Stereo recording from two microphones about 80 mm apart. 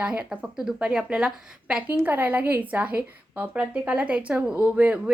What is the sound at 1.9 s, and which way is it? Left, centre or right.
A woman's voice, right.